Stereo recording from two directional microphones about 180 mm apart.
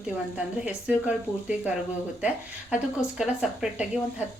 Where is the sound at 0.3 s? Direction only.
5° right (ahead or behind).